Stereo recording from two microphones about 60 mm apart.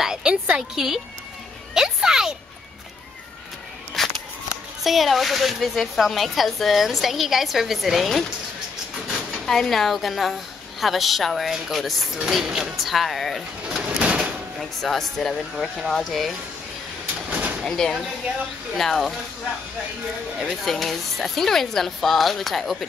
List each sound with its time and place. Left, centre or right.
0.0 s music: centre
0.7 s speech: centre
1.7 s music: centre
4.0 s a sound: centre
4.8 s a woman's voice: centre
9.5 s a woman's voice: centre
13.7 s bird: centre
14.6 s a woman's voice: centre
15.5 s a woman's voice: centre
17.3 s sliding door: right
17.6 s a woman's voice: centre
20.3 s a woman's voice: centre